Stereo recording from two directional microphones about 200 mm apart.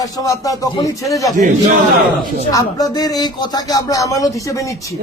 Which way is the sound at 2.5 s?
20° left (ahead or behind).